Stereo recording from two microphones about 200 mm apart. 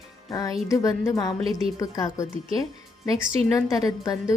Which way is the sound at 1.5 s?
Centre (ahead or behind).